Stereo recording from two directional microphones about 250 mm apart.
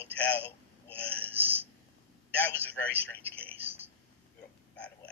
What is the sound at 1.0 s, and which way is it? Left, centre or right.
Speech, centre.